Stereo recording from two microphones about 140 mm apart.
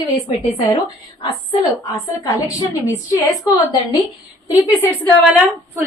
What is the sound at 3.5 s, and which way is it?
Speech, 10° right (ahead or behind).